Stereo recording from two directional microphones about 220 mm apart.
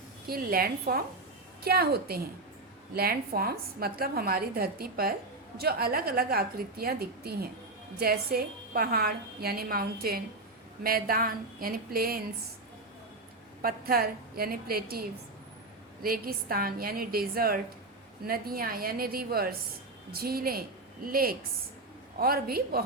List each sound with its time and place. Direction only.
0.3 s a woman's voice: 40° right (ahead or behind)
13.6 s a woman's voice: 40° right (ahead or behind)
16.0 s a woman's voice: 40° right (ahead or behind)